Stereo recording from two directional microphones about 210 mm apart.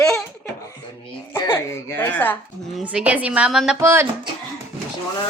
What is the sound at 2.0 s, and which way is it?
Speech, 10° left (ahead or behind).